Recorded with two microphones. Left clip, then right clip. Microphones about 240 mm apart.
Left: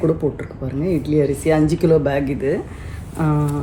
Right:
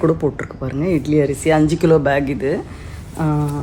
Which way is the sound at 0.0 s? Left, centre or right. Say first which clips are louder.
Right 2 dB; right.